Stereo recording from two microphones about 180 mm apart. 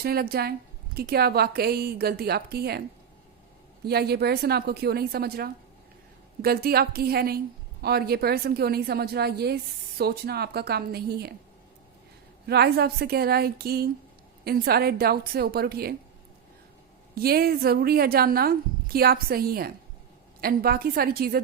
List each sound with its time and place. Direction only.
0.0 s a woman's voice: 60° right (ahead or behind)
3.8 s a woman's voice: 60° right (ahead or behind)
12.5 s a woman's voice: 65° right (ahead or behind)
17.2 s a woman's voice: 55° right (ahead or behind)